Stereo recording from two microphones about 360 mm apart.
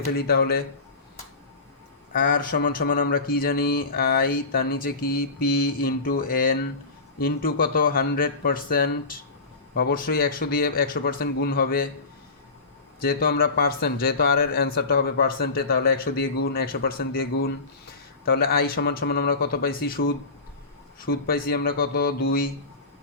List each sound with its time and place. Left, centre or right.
0.3 s speech: left
2.1 s speech: left
13.0 s speech: left